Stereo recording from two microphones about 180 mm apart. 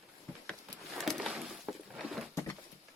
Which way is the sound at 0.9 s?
Centre (ahead or behind).